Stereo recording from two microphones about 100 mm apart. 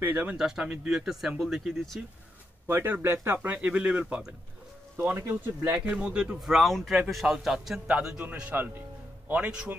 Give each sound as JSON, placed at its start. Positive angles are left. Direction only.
{"t": 0.0, "sound": "speech", "side_deg": -15}
{"t": 2.6, "sound": "speech", "side_deg": -20}
{"t": 4.9, "sound": "speech", "side_deg": -25}
{"t": 5.7, "sound": "speech", "side_deg": -10}